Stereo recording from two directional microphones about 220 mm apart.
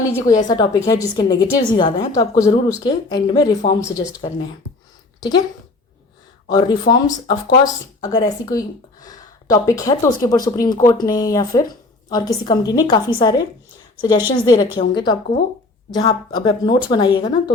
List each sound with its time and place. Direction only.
0.4 s a woman's voice: 15° left (ahead or behind)
6.5 s a woman's voice: 20° left (ahead or behind)